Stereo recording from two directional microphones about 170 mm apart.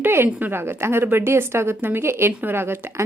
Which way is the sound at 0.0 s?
15° right (ahead or behind).